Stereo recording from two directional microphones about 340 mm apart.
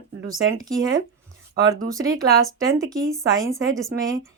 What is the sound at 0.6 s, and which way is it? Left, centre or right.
Speech, centre.